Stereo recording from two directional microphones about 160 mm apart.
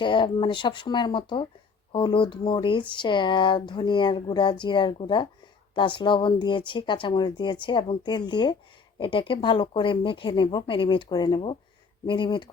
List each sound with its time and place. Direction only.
0.0 s speech: 30° left (ahead or behind)